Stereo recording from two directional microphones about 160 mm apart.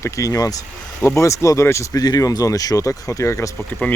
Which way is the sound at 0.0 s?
20° left (ahead or behind).